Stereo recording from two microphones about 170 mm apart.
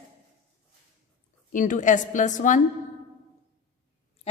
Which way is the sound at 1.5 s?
50° left (ahead or behind).